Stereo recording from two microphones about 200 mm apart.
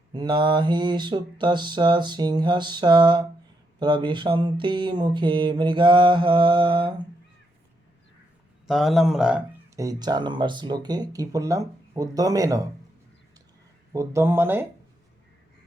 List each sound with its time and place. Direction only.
0.1 s a sound: 20° right (ahead or behind)
8.6 s speech: centre (ahead or behind)
9.7 s speech: 20° right (ahead or behind)
13.9 s speech: 15° right (ahead or behind)